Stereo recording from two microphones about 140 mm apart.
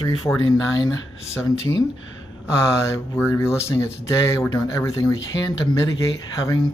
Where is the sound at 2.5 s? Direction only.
20° left (ahead or behind).